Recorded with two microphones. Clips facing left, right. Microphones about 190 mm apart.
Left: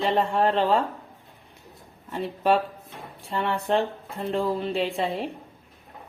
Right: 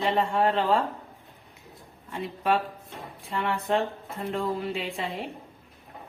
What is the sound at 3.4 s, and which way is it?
A woman's voice, 30° left (ahead or behind).